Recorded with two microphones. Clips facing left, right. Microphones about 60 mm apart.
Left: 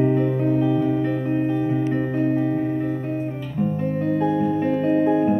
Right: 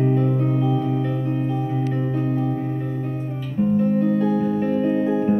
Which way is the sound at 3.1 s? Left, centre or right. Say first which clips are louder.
Left 2 dB; left.